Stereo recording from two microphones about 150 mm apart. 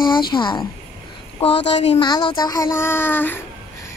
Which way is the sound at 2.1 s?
30° left (ahead or behind).